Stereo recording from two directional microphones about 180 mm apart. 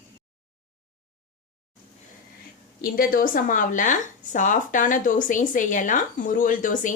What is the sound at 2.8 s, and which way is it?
Speech, 55° left (ahead or behind).